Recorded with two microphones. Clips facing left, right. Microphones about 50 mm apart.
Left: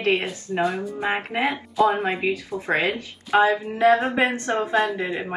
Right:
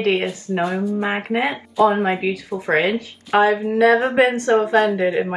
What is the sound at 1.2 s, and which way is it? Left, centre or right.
Speech, right.